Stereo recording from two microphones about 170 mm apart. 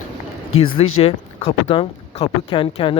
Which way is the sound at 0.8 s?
35° left (ahead or behind).